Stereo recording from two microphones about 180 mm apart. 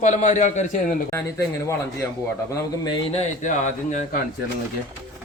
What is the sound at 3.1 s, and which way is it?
Speech, 40° left (ahead or behind).